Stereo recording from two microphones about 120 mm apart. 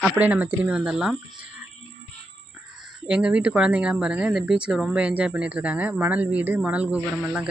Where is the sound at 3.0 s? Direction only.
10° right (ahead or behind).